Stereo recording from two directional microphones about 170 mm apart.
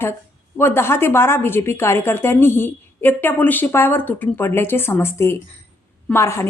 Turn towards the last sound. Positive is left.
turn(degrees=15)  # may be behind; listen again after turning